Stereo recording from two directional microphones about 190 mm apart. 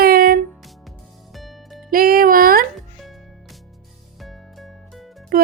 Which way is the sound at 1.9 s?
50° right (ahead or behind).